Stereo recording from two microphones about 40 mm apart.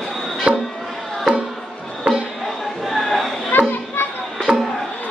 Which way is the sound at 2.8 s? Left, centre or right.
Centre.